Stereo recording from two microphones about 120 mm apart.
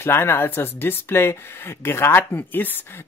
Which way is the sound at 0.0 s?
20° left (ahead or behind).